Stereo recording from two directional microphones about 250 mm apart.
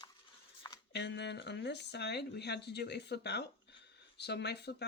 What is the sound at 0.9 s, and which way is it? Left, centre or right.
Speech, left.